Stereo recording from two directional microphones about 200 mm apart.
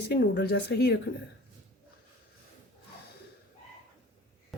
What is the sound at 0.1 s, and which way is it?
Speech, 55° left (ahead or behind).